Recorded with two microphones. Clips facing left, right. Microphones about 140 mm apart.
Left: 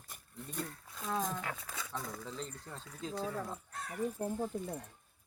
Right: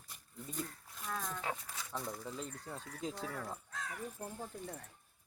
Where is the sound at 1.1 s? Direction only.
20° left (ahead or behind).